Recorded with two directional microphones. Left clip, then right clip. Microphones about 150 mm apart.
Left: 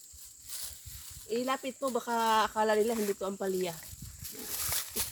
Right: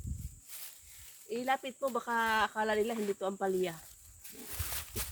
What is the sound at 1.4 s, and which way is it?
Speech, centre (ahead or behind).